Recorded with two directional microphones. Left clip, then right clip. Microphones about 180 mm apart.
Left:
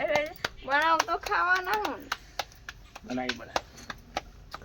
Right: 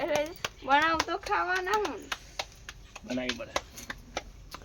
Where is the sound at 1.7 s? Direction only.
45° left (ahead or behind).